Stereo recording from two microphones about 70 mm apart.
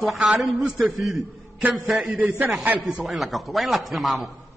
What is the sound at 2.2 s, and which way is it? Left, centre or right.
Speech, right.